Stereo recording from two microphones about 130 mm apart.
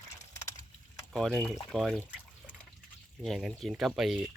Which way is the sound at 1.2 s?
5° left (ahead or behind).